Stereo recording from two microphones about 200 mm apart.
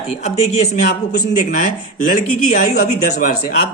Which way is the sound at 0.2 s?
35° left (ahead or behind).